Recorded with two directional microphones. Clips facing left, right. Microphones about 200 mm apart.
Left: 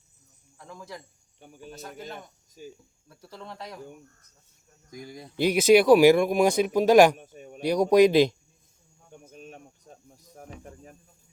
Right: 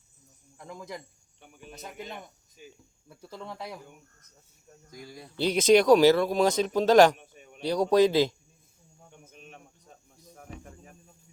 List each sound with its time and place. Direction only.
0.6 s speech: 15° right (ahead or behind)
1.4 s speech: 35° left (ahead or behind)
3.1 s speech: 10° right (ahead or behind)
4.9 s speech: 20° left (ahead or behind)
7.2 s a sound: 40° left (ahead or behind)
7.6 s speech: 15° left (ahead or behind)
9.3 s cricket: 40° left (ahead or behind)